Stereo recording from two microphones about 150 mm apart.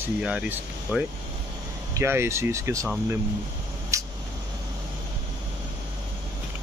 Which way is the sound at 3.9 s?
20° right (ahead or behind).